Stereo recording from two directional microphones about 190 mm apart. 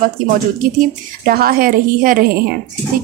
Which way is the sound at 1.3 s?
50° right (ahead or behind).